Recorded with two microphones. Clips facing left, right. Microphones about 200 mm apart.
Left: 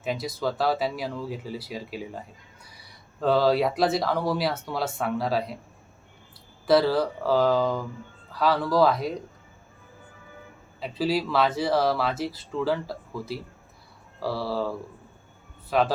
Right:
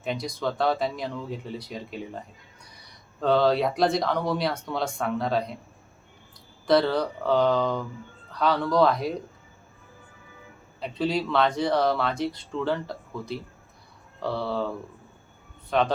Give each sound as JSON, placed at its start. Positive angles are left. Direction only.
{"t": 0.0, "sound": "speech", "side_deg": 5}
{"t": 6.7, "sound": "speech", "side_deg": 5}
{"t": 10.8, "sound": "speech", "side_deg": 5}